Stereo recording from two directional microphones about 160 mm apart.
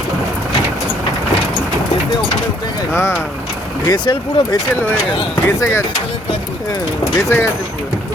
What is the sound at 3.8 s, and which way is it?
Speech, 25° left (ahead or behind).